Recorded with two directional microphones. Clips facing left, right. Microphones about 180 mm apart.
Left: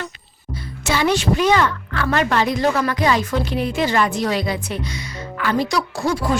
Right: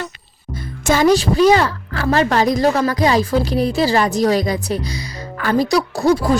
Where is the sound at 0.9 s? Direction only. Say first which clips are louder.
Right 5 dB; 40° right (ahead or behind).